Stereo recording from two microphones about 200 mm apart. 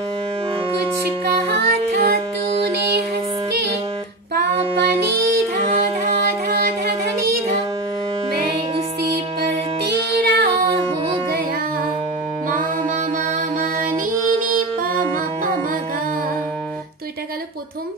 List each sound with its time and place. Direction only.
1.7 s music: 55° right (ahead or behind)
4.4 s music: 55° right (ahead or behind)
9.8 s music: 55° right (ahead or behind)